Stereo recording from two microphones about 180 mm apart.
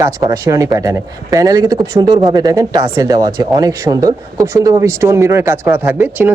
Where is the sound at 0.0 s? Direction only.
20° right (ahead or behind).